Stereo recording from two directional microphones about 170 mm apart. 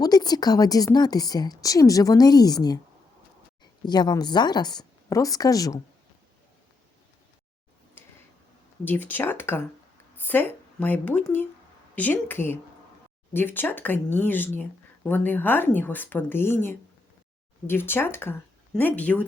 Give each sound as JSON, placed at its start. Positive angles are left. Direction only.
{"t": 0.0, "sound": "a woman's voice", "side_deg": 25}
{"t": 3.8, "sound": "a woman's voice", "side_deg": 25}
{"t": 8.0, "sound": "tick-tock", "side_deg": 10}
{"t": 8.8, "sound": "speech", "side_deg": 10}